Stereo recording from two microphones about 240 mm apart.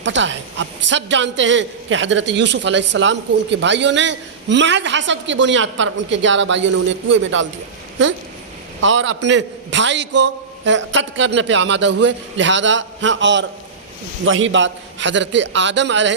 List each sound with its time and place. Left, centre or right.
0.0 s a man's voice: right
8.8 s a man's voice: right